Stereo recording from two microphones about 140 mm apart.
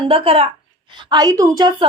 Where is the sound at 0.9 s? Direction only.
35° right (ahead or behind).